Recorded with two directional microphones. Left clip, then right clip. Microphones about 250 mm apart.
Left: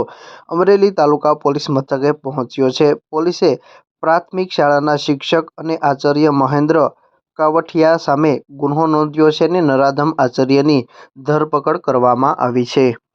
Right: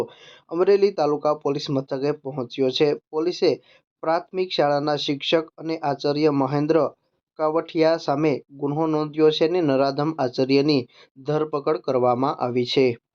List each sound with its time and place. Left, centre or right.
0.0 s speech: left